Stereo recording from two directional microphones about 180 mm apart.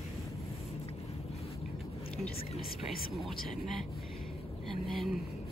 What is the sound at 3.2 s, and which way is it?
Speech, centre (ahead or behind).